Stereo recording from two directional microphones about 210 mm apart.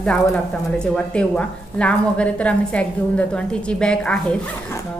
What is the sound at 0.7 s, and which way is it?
A woman's voice, 5° left (ahead or behind).